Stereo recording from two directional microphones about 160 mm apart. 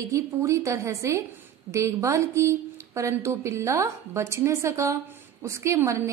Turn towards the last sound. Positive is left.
turn(degrees=-20)  # may be behind; listen again after turning